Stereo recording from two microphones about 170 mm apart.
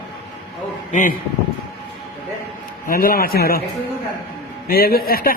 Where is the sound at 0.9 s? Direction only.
50° left (ahead or behind).